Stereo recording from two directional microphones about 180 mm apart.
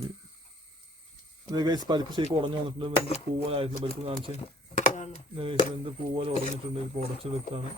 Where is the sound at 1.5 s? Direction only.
20° right (ahead or behind).